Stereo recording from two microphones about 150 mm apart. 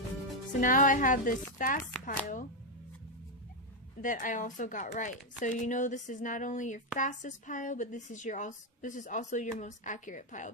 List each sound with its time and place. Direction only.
0.6 s speech: 60° left (ahead or behind)
4.0 s speech: 60° left (ahead or behind)